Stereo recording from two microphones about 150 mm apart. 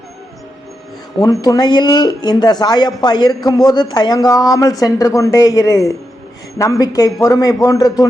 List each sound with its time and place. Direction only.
1.2 s speech: 25° left (ahead or behind)